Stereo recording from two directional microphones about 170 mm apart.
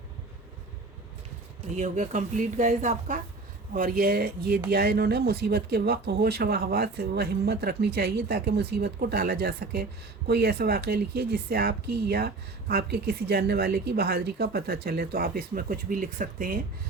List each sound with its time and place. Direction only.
1.7 s a woman's voice: 45° right (ahead or behind)
3.8 s speech: 55° right (ahead or behind)